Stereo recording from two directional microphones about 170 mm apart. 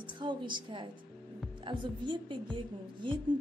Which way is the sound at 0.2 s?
25° right (ahead or behind).